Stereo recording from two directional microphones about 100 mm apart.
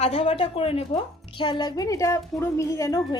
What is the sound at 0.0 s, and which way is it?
Speech, 90° left.